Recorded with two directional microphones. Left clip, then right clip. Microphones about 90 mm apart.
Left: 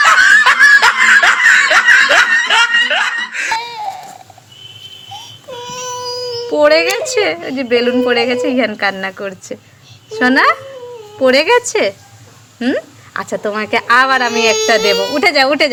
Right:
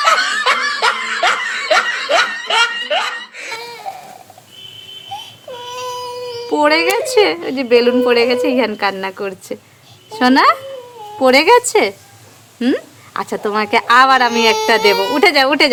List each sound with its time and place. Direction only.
0.0 s snicker: 40° left (ahead or behind)
5.1 s baby cry: 20° right (ahead or behind)
5.6 s a woman's voice: 10° right (ahead or behind)
12.5 s speech: 25° right (ahead or behind)
13.1 s a woman's voice: 10° right (ahead or behind)
14.7 s speech: 20° right (ahead or behind)